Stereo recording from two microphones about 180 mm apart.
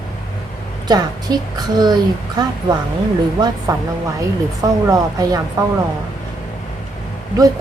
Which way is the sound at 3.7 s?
20° right (ahead or behind).